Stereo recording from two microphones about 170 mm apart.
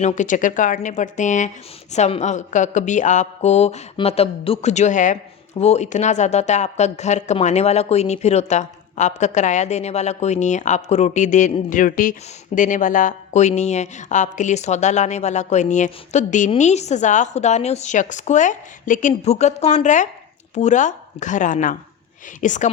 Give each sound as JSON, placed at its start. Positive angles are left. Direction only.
{"t": 0.0, "sound": "speech", "side_deg": 45}